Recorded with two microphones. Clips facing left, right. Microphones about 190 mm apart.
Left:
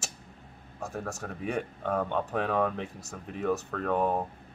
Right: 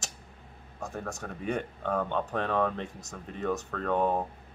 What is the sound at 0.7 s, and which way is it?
Speech, 5° left (ahead or behind).